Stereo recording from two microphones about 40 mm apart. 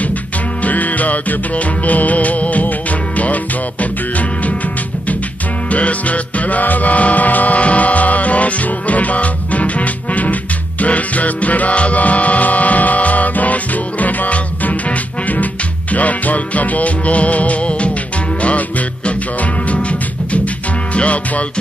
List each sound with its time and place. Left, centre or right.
0.7 s music: left
3.8 s music: left
5.7 s music: left